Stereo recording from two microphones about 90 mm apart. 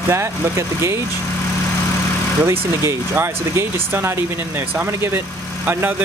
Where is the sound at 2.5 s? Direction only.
30° right (ahead or behind).